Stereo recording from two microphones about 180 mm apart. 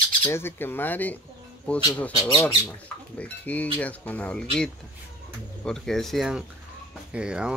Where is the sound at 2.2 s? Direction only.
20° left (ahead or behind).